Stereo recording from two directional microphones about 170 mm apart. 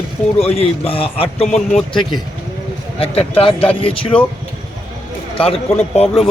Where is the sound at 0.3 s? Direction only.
35° left (ahead or behind).